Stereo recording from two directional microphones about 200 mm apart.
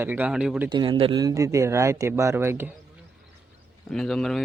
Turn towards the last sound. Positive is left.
turn(degrees=0)  # may be behind; listen again after turning